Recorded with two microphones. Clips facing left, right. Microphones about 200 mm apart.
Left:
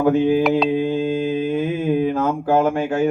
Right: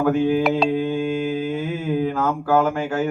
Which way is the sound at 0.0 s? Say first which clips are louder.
Left 2 dB; 20° left (ahead or behind).